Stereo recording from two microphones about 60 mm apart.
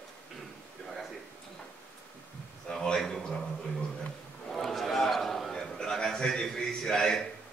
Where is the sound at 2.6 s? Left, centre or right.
Centre.